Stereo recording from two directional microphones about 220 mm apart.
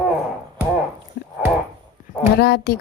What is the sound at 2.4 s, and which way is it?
Speech, 45° left (ahead or behind).